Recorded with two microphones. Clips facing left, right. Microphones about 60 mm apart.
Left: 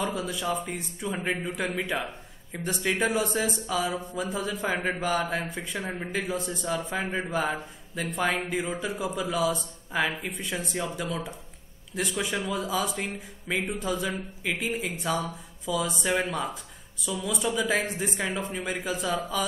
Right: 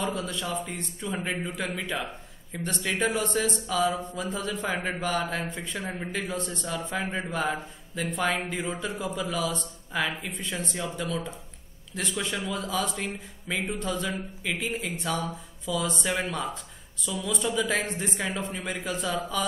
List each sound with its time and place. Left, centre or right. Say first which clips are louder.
0.0 s a woman's voice: left 1 dB; centre